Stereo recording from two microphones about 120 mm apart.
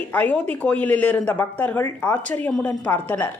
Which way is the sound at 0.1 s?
10° left (ahead or behind).